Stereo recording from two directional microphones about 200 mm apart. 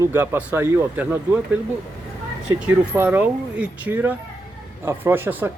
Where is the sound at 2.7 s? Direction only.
10° right (ahead or behind).